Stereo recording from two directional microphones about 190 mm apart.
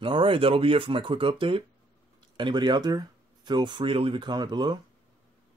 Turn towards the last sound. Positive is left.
turn(degrees=-20)  # may be behind; listen again after turning